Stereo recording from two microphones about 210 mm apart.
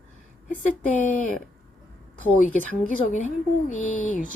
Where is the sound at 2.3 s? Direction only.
40° left (ahead or behind).